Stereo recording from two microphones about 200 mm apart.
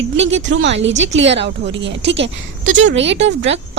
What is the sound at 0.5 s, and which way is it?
A woman's voice, 65° right (ahead or behind).